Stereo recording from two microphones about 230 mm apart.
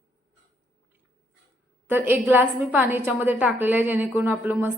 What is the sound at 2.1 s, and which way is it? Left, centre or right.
A woman's voice, centre.